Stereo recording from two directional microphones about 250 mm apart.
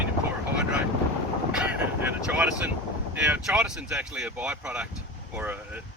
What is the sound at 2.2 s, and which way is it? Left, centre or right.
Speech, centre.